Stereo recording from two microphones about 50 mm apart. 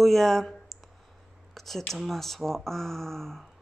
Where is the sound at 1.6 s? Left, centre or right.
Centre.